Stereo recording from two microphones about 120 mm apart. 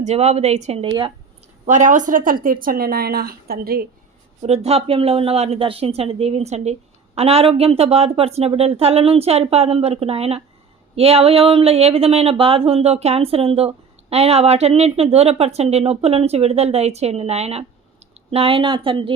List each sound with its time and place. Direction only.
0.0 s speech: 65° right (ahead or behind)
0.9 s speech: 40° right (ahead or behind)
1.6 s a woman's voice: 90° right
4.4 s speech: 60° right (ahead or behind)
7.2 s speech: 55° right (ahead or behind)